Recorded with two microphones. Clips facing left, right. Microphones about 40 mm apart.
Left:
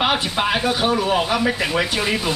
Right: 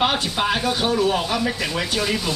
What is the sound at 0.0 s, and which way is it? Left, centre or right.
Speech, centre.